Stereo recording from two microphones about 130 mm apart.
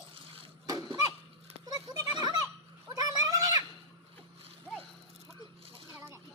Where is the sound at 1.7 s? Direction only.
35° right (ahead or behind).